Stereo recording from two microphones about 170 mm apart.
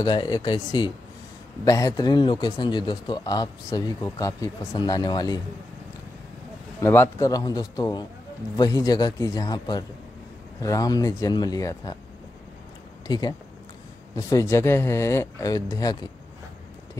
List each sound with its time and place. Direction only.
0.0 s a man's voice: 25° left (ahead or behind)
6.8 s a man's voice: 15° left (ahead or behind)
13.0 s speech: 25° left (ahead or behind)